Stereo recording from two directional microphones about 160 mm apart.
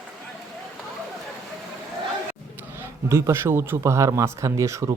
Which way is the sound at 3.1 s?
15° right (ahead or behind).